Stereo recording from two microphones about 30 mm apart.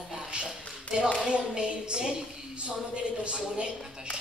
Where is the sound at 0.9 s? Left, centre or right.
Left.